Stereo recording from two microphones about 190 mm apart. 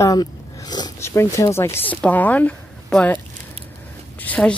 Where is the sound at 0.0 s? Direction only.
20° left (ahead or behind).